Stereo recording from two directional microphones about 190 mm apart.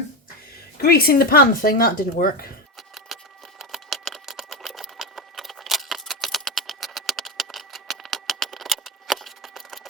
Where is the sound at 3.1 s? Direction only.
Centre (ahead or behind).